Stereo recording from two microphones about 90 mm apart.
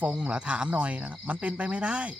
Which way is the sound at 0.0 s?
15° right (ahead or behind).